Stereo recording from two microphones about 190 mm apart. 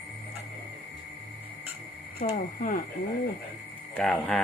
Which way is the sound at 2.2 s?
40° left (ahead or behind).